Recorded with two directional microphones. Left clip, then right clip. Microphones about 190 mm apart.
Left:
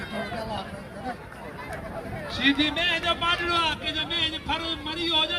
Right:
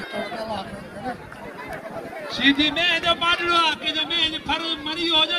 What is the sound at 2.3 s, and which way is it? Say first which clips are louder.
A man's voice: right 4 dB; 45° right (ahead or behind).